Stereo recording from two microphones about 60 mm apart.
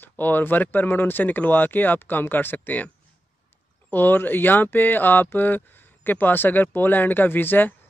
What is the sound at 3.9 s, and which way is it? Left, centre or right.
Speech, left.